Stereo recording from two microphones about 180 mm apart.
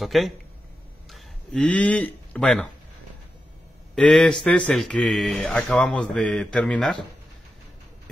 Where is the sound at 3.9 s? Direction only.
5° left (ahead or behind).